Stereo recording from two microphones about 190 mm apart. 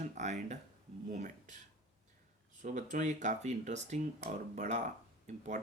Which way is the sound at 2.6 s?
40° right (ahead or behind).